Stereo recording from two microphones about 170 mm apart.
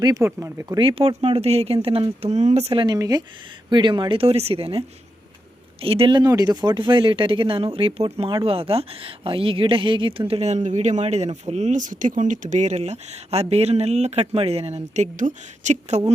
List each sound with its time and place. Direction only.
0.0 s speech: 20° right (ahead or behind); by 2.8 s 40° right (ahead or behind)
2.8 s speech: 20° right (ahead or behind)
5.8 s speech: 35° right (ahead or behind)